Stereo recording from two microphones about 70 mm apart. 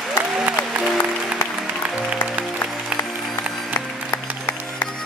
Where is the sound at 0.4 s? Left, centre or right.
Centre.